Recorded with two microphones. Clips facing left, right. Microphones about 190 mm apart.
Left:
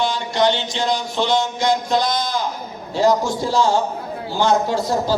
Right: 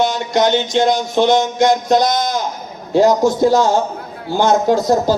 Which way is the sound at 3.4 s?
45° right (ahead or behind).